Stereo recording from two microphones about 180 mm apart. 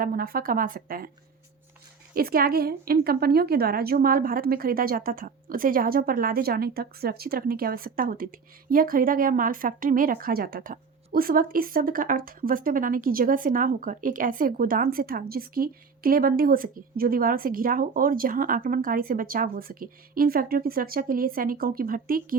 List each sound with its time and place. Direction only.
0.0 s a woman's voice: 55° right (ahead or behind)
2.1 s a woman's voice: 55° right (ahead or behind)